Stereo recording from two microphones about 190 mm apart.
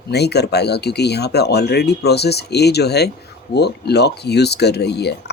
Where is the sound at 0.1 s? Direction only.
60° left (ahead or behind).